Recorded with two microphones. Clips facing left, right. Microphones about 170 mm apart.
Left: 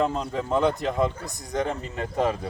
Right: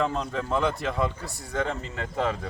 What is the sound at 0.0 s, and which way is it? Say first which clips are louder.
Speech: left 2 dB; 15° left (ahead or behind).